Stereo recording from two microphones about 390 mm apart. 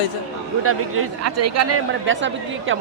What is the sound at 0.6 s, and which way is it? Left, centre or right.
A man's voice, right.